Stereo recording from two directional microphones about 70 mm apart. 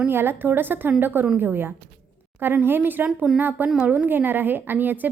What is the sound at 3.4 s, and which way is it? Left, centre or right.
Speech, right.